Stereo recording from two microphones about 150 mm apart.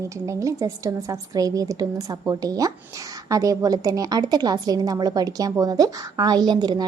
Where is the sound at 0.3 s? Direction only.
20° right (ahead or behind).